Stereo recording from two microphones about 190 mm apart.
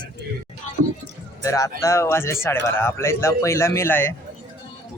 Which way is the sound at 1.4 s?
15° left (ahead or behind).